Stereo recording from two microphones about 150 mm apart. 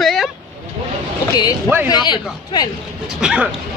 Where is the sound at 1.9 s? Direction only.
30° left (ahead or behind).